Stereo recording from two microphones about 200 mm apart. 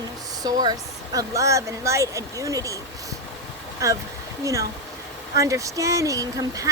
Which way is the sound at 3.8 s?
15° right (ahead or behind).